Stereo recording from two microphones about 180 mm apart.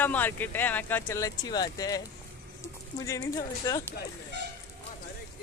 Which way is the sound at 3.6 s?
15° left (ahead or behind).